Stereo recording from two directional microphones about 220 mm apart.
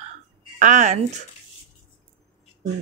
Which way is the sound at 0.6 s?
30° right (ahead or behind).